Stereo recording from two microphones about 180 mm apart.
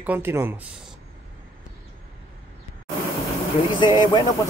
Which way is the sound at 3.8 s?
25° left (ahead or behind).